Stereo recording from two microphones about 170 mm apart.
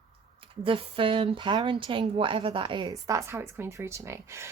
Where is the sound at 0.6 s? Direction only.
30° right (ahead or behind); by 4.5 s 15° right (ahead or behind).